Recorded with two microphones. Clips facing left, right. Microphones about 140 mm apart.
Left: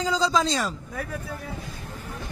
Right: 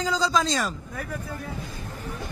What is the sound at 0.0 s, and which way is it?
Speech, 25° left (ahead or behind).